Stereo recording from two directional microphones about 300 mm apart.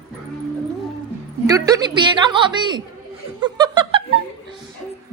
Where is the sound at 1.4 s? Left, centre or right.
Centre.